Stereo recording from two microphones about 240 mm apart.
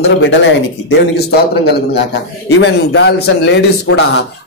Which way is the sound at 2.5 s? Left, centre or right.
Left.